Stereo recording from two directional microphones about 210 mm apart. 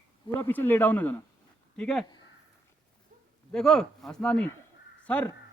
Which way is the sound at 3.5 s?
5° left (ahead or behind).